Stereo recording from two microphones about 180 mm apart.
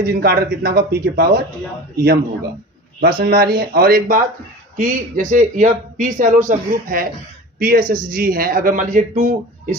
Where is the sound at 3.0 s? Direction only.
60° right (ahead or behind).